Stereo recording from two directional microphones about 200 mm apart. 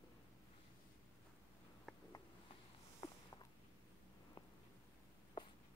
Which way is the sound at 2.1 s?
20° left (ahead or behind).